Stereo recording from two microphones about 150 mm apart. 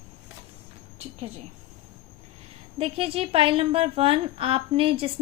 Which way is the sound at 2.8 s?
40° right (ahead or behind).